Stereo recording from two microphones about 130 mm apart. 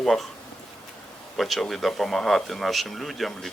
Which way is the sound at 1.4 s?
Centre (ahead or behind).